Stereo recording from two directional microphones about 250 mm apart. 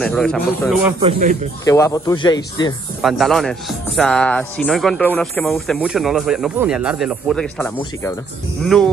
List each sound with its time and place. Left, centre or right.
0.0 s speech: centre
1.0 s speech: right
1.6 s speech: centre
3.0 s speech: centre